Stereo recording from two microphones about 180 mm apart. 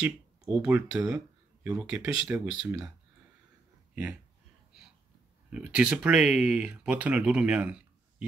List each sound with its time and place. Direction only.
0.0 s speech: 10° right (ahead or behind)
3.9 s speech: 5° right (ahead or behind)
5.5 s speech: 5° right (ahead or behind)